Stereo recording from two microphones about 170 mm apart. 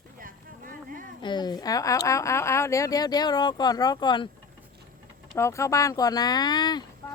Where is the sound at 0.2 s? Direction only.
55° right (ahead or behind).